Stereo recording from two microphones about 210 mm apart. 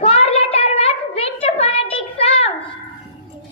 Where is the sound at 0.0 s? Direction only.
30° left (ahead or behind).